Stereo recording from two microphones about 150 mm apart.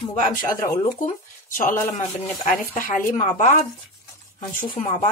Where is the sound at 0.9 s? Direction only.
60° left (ahead or behind).